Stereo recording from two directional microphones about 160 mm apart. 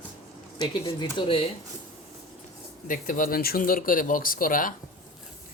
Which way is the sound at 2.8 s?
60° left (ahead or behind).